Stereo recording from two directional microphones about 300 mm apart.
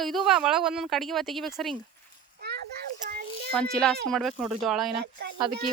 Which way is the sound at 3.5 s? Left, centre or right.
Centre.